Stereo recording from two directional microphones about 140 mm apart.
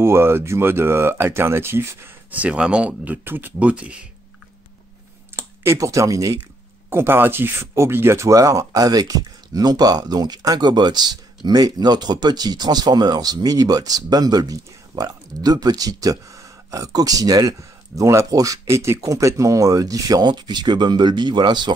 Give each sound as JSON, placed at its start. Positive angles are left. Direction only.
{"t": 0.0, "sound": "speech", "side_deg": -15}
{"t": 5.3, "sound": "speech", "side_deg": -20}